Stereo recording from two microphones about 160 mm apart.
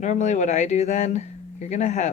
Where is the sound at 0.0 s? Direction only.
45° left (ahead or behind).